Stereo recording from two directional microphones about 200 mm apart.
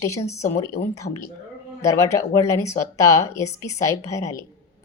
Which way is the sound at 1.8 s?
15° left (ahead or behind).